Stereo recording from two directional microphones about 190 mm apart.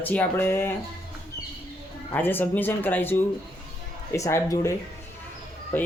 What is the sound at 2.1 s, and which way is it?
Speech, 10° left (ahead or behind).